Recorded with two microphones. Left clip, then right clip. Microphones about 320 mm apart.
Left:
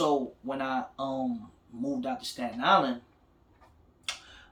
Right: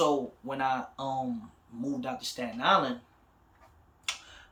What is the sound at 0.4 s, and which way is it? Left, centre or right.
Speech, centre.